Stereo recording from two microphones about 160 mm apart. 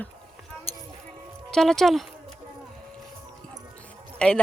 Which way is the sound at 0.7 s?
40° left (ahead or behind).